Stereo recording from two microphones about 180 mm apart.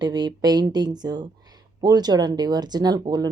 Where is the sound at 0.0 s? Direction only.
25° right (ahead or behind).